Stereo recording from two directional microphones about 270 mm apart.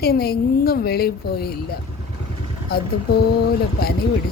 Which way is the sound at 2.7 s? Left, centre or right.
Left.